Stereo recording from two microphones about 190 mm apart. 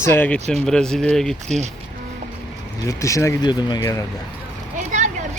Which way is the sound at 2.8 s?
15° left (ahead or behind).